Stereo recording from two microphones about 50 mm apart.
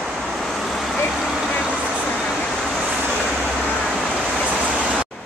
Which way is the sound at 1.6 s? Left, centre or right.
Right.